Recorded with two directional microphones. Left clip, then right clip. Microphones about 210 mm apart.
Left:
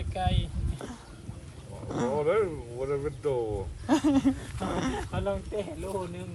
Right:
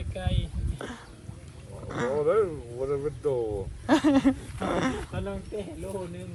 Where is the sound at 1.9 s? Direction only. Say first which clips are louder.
Right 1 dB; 15° left (ahead or behind).